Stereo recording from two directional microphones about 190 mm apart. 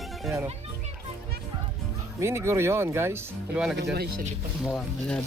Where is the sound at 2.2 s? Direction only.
15° right (ahead or behind).